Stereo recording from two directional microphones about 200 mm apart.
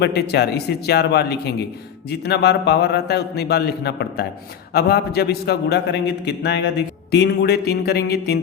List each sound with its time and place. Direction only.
0.0 s a man's voice: 55° left (ahead or behind)